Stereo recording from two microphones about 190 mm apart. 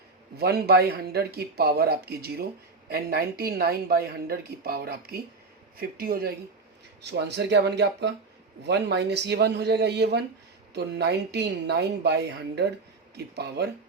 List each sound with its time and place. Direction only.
0.3 s speech: 55° right (ahead or behind)
7.0 s speech: 65° right (ahead or behind)
13.1 s speech: 60° right (ahead or behind)